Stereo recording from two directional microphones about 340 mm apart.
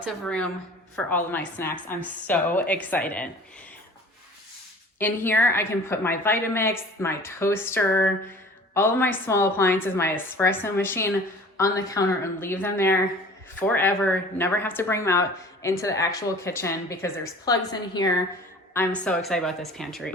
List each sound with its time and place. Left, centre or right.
0.0 s a woman's voice: centre
4.9 s a woman's voice: centre